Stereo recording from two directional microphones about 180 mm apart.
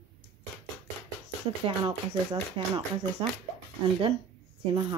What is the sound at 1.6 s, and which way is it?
Speech, 30° right (ahead or behind).